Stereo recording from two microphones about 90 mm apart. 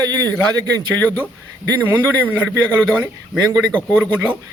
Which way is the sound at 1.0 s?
20° left (ahead or behind).